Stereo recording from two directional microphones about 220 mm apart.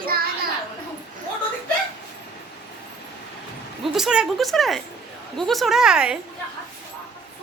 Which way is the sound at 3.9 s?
5° right (ahead or behind).